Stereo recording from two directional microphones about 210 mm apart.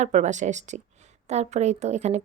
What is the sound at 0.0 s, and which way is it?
A woman's voice, 35° right (ahead or behind).